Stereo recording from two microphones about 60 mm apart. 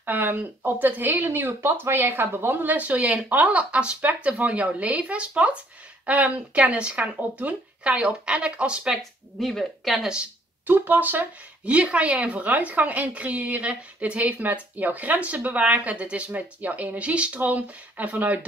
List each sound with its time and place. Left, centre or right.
0.0 s speech: right
8.9 s speech: centre
10.7 s speech: right